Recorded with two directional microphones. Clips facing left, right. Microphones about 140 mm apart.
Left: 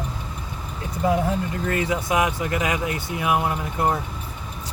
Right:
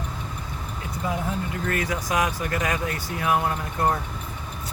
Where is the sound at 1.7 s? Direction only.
25° left (ahead or behind).